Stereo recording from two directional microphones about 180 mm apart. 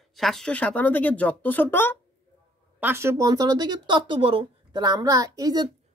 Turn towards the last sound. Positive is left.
turn(degrees=-20)  # may be behind; listen again after turning